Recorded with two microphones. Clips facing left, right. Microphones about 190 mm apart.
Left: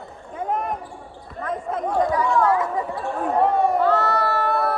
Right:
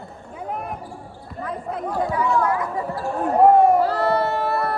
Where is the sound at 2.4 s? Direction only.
25° left (ahead or behind).